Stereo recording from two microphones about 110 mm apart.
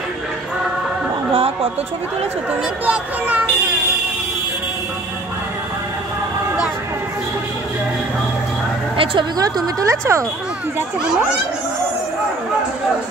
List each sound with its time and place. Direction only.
1.3 s chatter: 65° right (ahead or behind)
2.8 s speech: 15° right (ahead or behind)
8.9 s a sound: 55° right (ahead or behind)
9.4 s speech: 35° right (ahead or behind)